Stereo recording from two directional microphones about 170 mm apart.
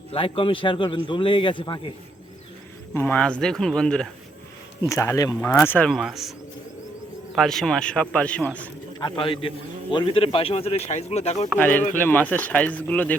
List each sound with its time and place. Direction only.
0.1 s a man's voice: 30° left (ahead or behind)
2.9 s speech: 10° left (ahead or behind)
4.9 s a man's voice: 15° left (ahead or behind)
5.5 s speech: 10° left (ahead or behind)
7.3 s speech: centre (ahead or behind)
9.0 s a man's voice: 25° left (ahead or behind)
11.5 s speech: 10° left (ahead or behind)